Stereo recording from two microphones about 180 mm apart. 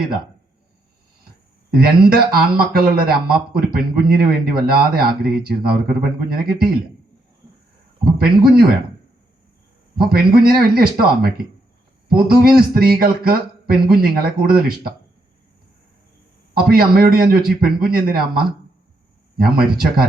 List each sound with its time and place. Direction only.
1.7 s speech: 55° right (ahead or behind)
8.0 s speech: 60° right (ahead or behind)
9.9 s speech: 55° right (ahead or behind)
16.6 s speech: 55° right (ahead or behind)